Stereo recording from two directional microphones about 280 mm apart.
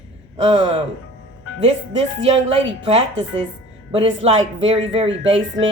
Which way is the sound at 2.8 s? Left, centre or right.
Centre.